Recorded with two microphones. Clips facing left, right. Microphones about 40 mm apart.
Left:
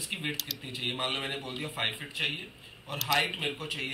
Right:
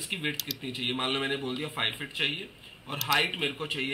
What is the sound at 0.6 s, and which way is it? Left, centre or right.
Speech, right.